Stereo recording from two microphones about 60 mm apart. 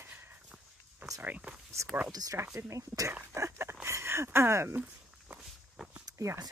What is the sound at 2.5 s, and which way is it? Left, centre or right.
Speech, right.